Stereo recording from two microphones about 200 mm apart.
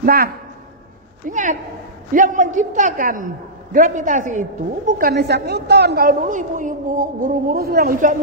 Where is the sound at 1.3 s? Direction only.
40° right (ahead or behind).